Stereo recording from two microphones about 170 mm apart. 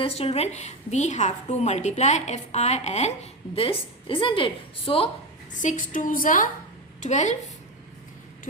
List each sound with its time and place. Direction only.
0.0 s a woman's voice: 35° left (ahead or behind)
5.5 s a woman's voice: 50° left (ahead or behind)